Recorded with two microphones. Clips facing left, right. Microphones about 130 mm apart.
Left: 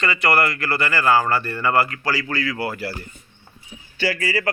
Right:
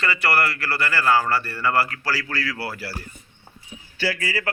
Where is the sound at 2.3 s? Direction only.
Centre (ahead or behind).